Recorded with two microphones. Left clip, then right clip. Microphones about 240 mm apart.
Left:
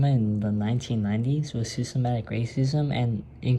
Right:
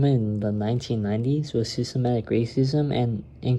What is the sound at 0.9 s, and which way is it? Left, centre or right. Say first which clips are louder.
Speech: right 3 dB; centre.